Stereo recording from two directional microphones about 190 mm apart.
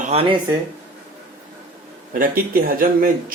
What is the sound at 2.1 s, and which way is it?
Speech, 50° right (ahead or behind).